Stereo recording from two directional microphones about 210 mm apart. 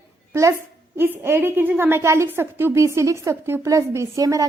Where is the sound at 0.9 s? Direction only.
10° right (ahead or behind).